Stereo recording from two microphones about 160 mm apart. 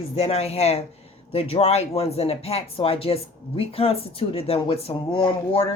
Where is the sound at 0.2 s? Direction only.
40° left (ahead or behind).